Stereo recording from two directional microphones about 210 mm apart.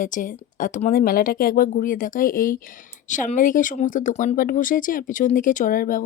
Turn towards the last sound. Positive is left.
turn(degrees=40)  # may be behind; listen again after turning